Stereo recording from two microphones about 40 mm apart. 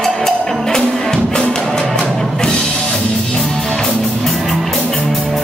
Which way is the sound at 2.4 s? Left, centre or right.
Centre.